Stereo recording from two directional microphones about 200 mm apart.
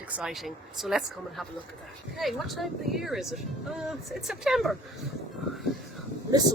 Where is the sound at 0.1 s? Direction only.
5° right (ahead or behind).